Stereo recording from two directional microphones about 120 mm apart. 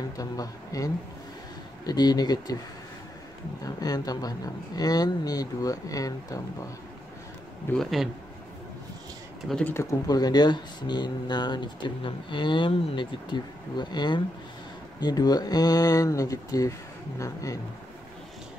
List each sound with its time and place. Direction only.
0.2 s a man's voice: 30° left (ahead or behind)
3.6 s speech: 30° left (ahead or behind)
7.7 s a man's voice: centre (ahead or behind)
9.5 s speech: 10° left (ahead or behind)
9.8 s a man's voice: 30° left (ahead or behind)